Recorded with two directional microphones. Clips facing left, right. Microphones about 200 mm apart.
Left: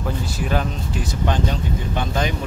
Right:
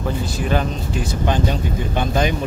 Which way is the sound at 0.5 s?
Centre (ahead or behind).